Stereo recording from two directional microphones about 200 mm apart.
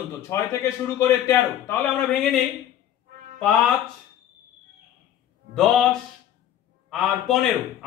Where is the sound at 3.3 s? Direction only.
Centre (ahead or behind).